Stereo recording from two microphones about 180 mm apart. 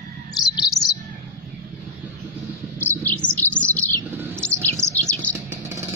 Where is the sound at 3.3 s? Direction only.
10° left (ahead or behind).